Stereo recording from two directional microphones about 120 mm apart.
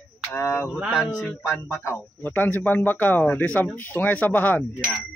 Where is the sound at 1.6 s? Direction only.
25° left (ahead or behind).